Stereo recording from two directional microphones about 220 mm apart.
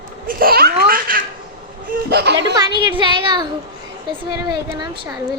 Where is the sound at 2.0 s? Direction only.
50° right (ahead or behind).